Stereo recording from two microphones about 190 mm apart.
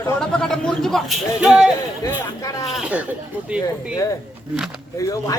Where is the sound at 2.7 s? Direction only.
5° right (ahead or behind).